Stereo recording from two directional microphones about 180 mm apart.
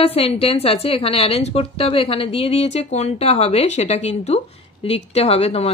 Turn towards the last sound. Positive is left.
turn(degrees=35)  # may be behind; listen again after turning